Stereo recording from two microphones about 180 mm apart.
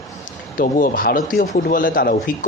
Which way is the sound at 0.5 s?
50° left (ahead or behind).